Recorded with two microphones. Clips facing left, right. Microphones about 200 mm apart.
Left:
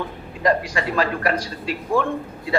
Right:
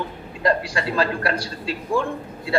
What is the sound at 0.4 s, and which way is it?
A man's voice, 30° right (ahead or behind).